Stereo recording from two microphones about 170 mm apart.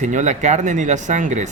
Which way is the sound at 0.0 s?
45° right (ahead or behind).